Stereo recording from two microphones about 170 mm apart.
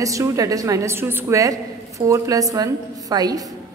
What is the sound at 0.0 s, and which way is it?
A woman's voice, 20° right (ahead or behind).